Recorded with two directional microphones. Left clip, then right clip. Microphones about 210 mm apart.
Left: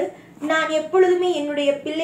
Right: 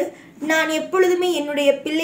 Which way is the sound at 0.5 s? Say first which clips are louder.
Even; 55° right (ahead or behind).